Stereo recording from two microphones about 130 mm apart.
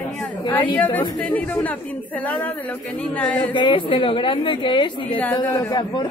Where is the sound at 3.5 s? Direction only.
40° left (ahead or behind).